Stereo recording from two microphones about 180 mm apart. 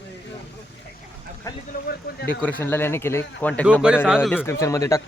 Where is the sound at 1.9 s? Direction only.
60° left (ahead or behind).